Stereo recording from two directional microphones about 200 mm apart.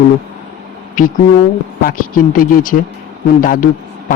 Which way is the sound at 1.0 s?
45° left (ahead or behind).